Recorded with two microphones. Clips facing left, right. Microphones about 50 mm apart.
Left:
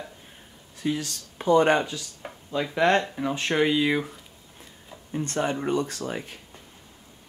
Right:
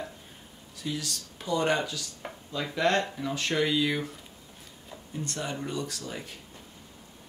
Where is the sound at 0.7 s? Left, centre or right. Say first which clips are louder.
Left 6 dB; left.